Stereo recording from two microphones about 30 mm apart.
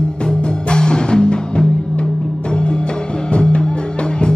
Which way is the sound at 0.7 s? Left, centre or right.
Left.